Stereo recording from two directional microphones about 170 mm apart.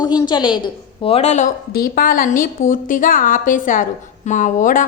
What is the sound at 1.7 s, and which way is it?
A woman's voice, 60° left (ahead or behind).